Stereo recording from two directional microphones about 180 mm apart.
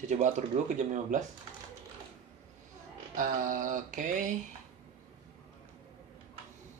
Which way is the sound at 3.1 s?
45° right (ahead or behind).